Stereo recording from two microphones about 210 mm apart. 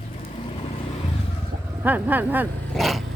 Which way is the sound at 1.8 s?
10° right (ahead or behind).